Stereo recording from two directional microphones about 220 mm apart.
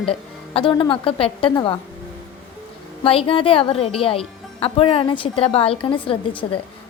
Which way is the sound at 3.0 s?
25° left (ahead or behind).